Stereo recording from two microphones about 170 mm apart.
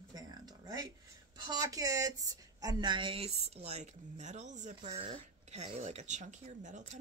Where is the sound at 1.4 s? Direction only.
20° right (ahead or behind).